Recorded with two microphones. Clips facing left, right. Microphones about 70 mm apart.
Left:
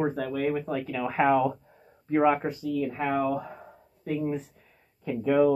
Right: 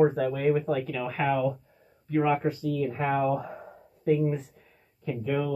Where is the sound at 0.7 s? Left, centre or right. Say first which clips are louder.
Right 1 dB; centre; by 2.4 s left.